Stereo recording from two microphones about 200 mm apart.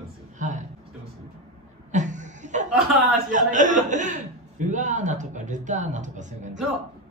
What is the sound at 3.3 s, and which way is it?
Music, 40° right (ahead or behind).